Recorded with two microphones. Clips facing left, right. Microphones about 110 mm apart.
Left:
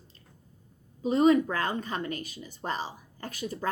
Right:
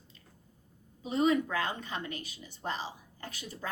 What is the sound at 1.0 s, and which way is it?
A woman's voice, 40° left (ahead or behind).